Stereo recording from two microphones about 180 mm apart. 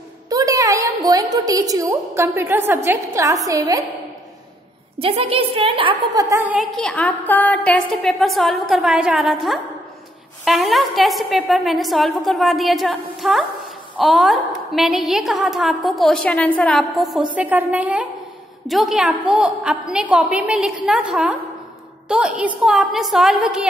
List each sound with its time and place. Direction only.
0.3 s a woman's voice: 20° right (ahead or behind)
4.9 s a woman's voice: 30° right (ahead or behind); by 6.7 s 10° right (ahead or behind)
6.8 s a woman's voice: 5° left (ahead or behind)